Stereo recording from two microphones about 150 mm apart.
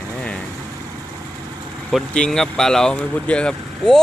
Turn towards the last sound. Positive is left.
turn(degrees=5)  # may be behind; listen again after turning